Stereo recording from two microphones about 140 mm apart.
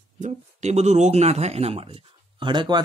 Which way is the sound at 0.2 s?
55° right (ahead or behind).